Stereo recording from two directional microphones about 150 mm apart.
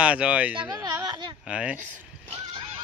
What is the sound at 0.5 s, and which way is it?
Speech, 25° right (ahead or behind).